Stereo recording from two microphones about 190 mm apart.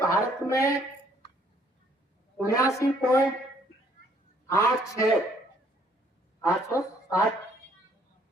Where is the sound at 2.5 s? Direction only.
15° left (ahead or behind).